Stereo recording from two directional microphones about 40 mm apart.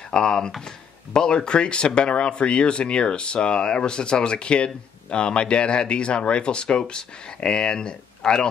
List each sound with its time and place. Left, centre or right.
0.1 s speech: centre